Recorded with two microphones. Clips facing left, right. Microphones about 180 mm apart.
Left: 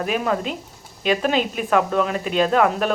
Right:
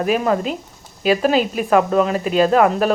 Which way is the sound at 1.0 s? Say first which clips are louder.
Right 4 dB; 5° right (ahead or behind).